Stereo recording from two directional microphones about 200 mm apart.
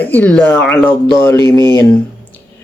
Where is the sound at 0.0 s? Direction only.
10° left (ahead or behind).